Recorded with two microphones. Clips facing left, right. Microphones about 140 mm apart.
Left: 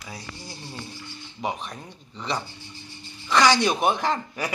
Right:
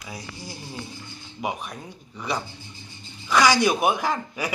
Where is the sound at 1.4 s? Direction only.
10° right (ahead or behind).